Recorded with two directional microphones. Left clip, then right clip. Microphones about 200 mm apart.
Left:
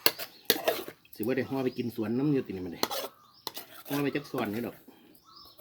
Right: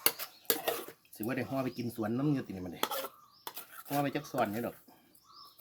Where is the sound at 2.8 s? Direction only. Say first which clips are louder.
Left 2 dB; 15° left (ahead or behind).